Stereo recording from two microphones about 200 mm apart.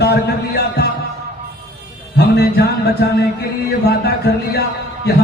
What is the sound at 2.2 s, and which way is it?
Music, 55° left (ahead or behind).